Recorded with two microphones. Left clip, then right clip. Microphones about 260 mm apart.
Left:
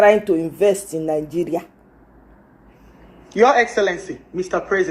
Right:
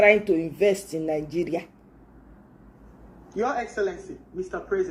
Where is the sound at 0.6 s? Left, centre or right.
Left.